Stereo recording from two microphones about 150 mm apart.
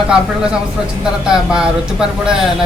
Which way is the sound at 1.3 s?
5° right (ahead or behind).